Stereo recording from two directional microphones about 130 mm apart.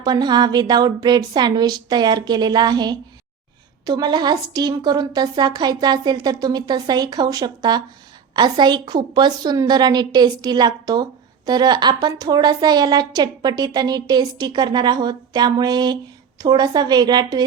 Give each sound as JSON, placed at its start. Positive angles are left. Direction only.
{"t": 0.0, "sound": "a woman's voice", "side_deg": -35}